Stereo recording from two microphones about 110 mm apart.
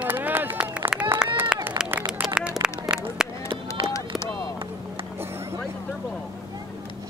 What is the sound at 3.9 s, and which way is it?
Run, 30° left (ahead or behind).